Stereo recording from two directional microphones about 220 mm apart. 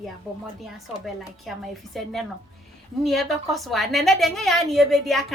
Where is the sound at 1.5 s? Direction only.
Centre (ahead or behind).